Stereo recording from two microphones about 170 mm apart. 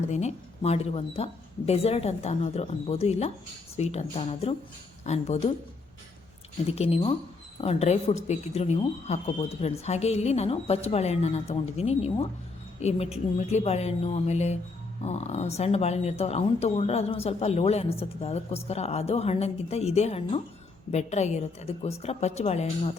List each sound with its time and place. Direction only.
0.1 s speech: 40° left (ahead or behind)
6.7 s speech: 35° left (ahead or behind)